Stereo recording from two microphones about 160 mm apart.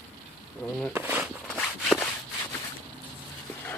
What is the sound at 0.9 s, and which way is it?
Speech, 10° right (ahead or behind).